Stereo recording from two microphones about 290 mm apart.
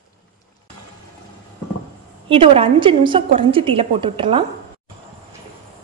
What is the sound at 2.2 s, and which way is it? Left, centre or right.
A woman's voice, centre.